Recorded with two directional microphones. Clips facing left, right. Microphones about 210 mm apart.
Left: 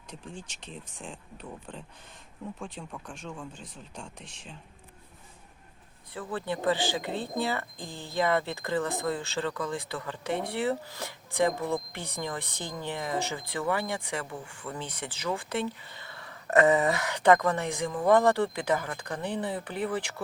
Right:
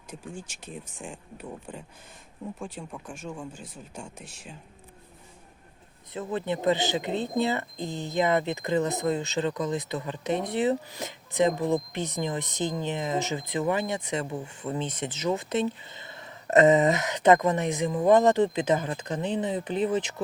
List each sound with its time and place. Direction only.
0.1 s speech: 45° right (ahead or behind)
1.0 s speech: 10° right (ahead or behind)
6.1 s speech: 20° right (ahead or behind)